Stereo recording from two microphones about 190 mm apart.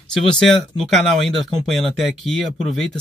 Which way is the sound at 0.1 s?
5° left (ahead or behind).